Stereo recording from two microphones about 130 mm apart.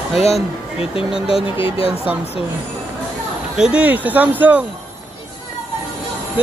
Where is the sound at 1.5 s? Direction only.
45° left (ahead or behind).